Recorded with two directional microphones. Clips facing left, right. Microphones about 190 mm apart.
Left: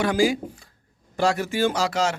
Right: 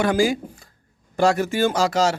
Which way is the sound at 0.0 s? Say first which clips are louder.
Right 1 dB; 50° right (ahead or behind).